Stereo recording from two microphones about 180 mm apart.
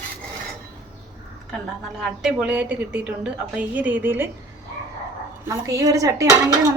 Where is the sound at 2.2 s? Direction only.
10° right (ahead or behind).